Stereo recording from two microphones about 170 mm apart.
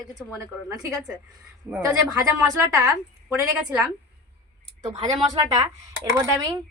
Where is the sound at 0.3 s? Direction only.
20° right (ahead or behind).